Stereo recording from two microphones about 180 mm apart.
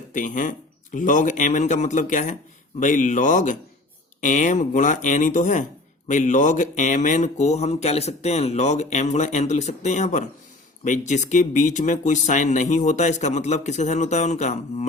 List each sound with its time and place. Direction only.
0.1 s speech: 45° left (ahead or behind)